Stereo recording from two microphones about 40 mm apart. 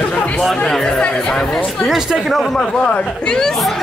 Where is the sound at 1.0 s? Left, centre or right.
Left.